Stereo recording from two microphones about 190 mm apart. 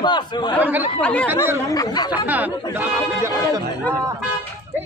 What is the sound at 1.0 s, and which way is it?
Speech, 5° left (ahead or behind).